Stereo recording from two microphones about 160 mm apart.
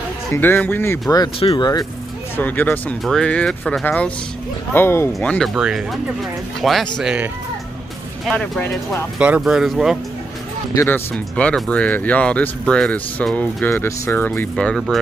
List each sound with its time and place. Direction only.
0.3 s speech: 10° left (ahead or behind)
1.4 s speech: 35° left (ahead or behind)
2.3 s speech: 10° left (ahead or behind)
5.5 s speech: 5° right (ahead or behind)
8.3 s speech: 5° left (ahead or behind)
9.2 s speech: 5° right (ahead or behind)
10.7 s speech: 20° left (ahead or behind)
11.1 s speech: 5° left (ahead or behind)